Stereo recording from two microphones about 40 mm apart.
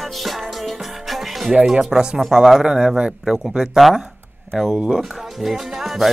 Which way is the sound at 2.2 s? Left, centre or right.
Centre.